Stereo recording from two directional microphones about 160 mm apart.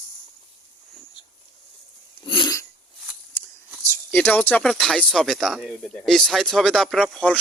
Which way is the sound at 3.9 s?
10° left (ahead or behind).